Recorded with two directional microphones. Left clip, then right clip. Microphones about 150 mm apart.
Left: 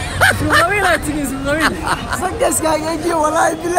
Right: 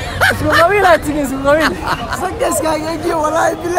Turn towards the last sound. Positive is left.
turn(degrees=-5)  # may be behind; listen again after turning